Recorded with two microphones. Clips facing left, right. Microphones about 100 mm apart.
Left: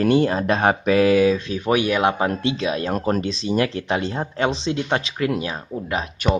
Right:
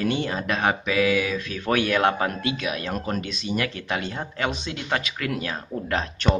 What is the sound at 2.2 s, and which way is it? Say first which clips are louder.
Speech: left 4 dB; 25° left (ahead or behind).